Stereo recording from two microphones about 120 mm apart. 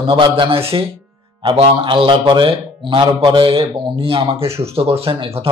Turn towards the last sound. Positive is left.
turn(degrees=-50)  # may be behind; listen again after turning